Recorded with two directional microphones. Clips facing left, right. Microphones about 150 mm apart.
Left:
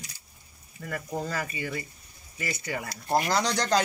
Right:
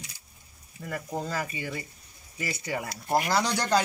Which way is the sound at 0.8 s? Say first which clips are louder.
Even; 20° right (ahead or behind).